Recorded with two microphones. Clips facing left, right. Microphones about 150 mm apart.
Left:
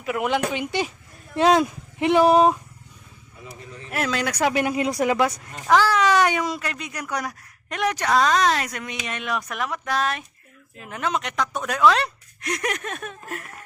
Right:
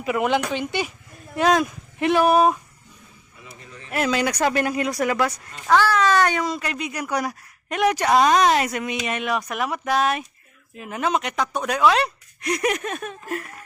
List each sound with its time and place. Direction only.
0.0 s speech: centre (ahead or behind)
1.4 s speech: 25° left (ahead or behind)
3.9 s speech: 5° right (ahead or behind)
4.4 s speech: 10° left (ahead or behind)
6.6 s a woman's voice: 5° right (ahead or behind)